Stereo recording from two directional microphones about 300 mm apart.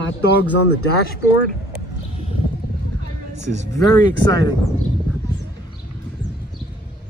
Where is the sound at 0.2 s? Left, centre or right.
Left.